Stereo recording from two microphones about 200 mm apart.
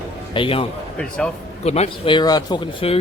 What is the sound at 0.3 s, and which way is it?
Speech, 25° left (ahead or behind).